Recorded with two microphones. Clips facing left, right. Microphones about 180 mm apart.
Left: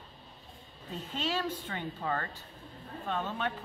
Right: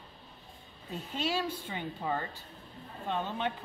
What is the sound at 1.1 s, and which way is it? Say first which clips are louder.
Speech: right 1 dB; 10° right (ahead or behind).